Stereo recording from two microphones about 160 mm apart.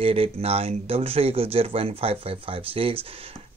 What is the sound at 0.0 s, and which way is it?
Speech, 35° right (ahead or behind).